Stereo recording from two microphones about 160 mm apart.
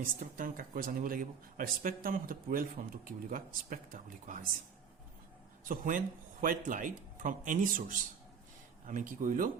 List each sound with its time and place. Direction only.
0.0 s speech: 60° right (ahead or behind)
5.6 s speech: 60° right (ahead or behind)